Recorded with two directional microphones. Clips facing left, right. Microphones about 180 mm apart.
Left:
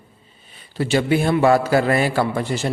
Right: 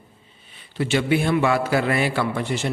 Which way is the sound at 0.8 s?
40° left (ahead or behind).